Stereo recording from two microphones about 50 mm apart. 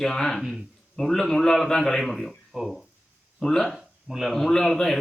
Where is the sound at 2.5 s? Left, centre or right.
Centre.